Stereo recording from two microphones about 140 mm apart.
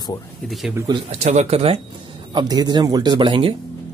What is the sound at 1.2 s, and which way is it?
Speech, 50° right (ahead or behind).